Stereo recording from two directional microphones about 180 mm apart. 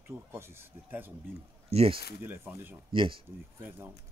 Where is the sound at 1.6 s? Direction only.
35° right (ahead or behind).